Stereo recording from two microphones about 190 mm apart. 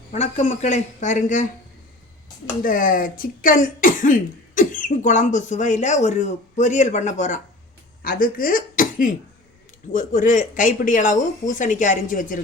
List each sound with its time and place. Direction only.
0.1 s speech: 35° left (ahead or behind)
2.6 s speech: 45° left (ahead or behind)